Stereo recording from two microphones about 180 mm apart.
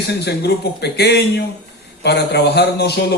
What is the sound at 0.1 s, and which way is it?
A man's voice, 65° left (ahead or behind).